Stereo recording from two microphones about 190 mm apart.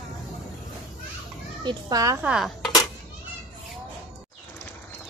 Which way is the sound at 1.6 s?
20° right (ahead or behind).